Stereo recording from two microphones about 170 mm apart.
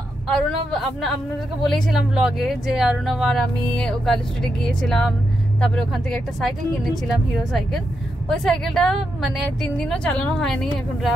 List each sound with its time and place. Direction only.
0.3 s speech: 5° left (ahead or behind)
8.3 s speech: 5° left (ahead or behind)